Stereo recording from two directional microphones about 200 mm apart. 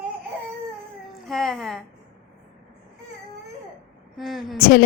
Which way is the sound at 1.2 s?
Centre (ahead or behind).